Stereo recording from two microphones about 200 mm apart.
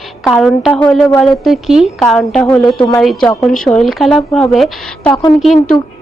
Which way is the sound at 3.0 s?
Centre (ahead or behind).